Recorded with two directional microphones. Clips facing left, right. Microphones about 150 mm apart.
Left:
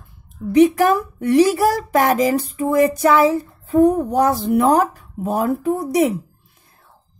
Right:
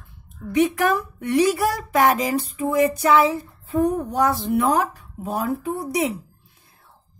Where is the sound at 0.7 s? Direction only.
40° left (ahead or behind).